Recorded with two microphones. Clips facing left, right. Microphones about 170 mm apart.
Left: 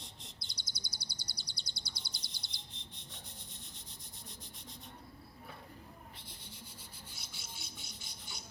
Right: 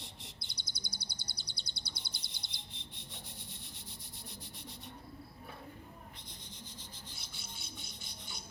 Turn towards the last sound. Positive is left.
turn(degrees=0)  # may be behind; listen again after turning